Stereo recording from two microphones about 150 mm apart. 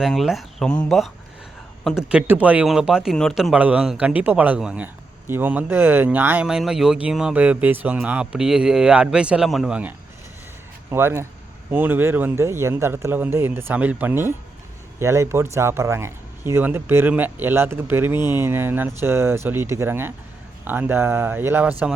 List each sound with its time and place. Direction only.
0.0 s speech: centre (ahead or behind)
10.9 s speech: 15° right (ahead or behind)